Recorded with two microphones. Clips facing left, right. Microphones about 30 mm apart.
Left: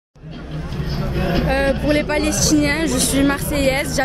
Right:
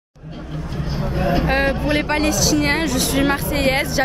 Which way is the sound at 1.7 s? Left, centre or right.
Centre.